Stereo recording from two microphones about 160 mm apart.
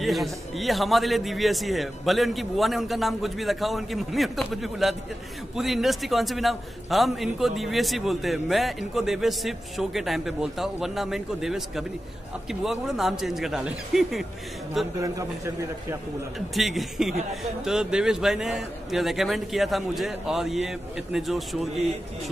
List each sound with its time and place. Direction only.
0.0 s a man's voice: centre (ahead or behind)
15.0 s a man's voice: 20° right (ahead or behind)
16.3 s a man's voice: centre (ahead or behind)